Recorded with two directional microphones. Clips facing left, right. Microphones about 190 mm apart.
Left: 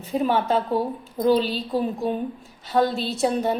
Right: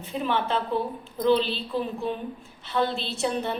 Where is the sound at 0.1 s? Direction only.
40° left (ahead or behind).